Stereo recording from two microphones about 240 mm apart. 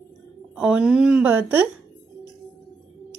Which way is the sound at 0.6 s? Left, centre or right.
Centre.